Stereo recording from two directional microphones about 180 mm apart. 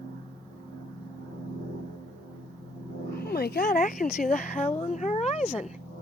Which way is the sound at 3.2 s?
60° left (ahead or behind).